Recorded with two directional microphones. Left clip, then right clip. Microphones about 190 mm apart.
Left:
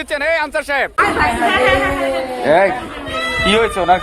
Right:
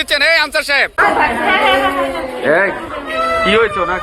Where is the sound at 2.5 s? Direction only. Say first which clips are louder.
Left 1 dB; 50° left (ahead or behind).